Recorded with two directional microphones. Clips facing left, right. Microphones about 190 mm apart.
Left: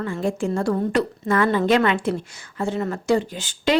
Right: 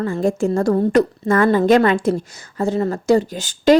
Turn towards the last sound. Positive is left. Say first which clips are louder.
# right 8 dB
turn(degrees=-40)  # may be behind; listen again after turning